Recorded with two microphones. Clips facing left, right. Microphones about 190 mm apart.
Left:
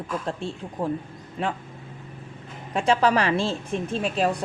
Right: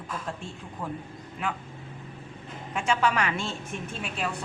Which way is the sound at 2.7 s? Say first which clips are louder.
Left 5 dB; 35° left (ahead or behind).